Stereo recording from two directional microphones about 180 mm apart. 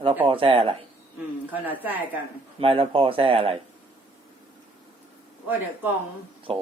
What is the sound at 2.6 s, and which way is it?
Speech, 30° right (ahead or behind).